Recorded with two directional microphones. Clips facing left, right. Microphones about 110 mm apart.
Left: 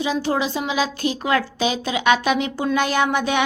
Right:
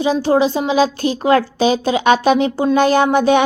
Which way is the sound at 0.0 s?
35° right (ahead or behind).